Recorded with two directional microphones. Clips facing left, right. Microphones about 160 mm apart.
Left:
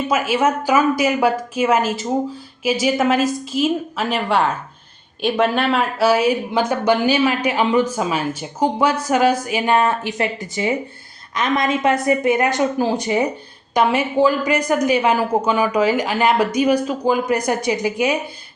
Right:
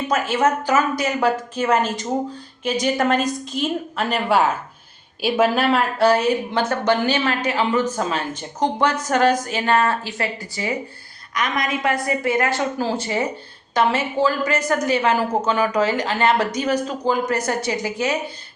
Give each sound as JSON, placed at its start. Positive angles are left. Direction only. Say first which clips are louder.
{"t": 0.1, "sound": "a woman's voice", "louder": "left 1 dB", "side_deg": 10}